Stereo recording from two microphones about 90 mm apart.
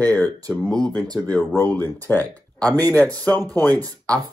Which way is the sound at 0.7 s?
5° left (ahead or behind).